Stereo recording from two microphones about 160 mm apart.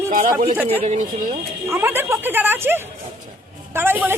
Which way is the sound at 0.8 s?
50° right (ahead or behind).